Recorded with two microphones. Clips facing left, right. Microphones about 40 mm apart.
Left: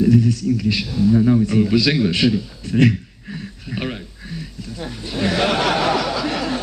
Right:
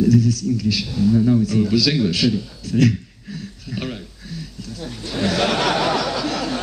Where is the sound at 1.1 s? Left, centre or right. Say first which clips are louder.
Left 2 dB; left.